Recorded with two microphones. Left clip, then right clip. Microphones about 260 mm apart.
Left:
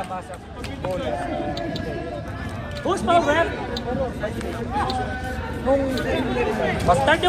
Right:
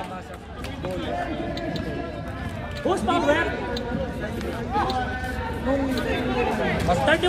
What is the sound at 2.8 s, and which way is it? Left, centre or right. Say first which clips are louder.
Speech: left 3 dB; centre.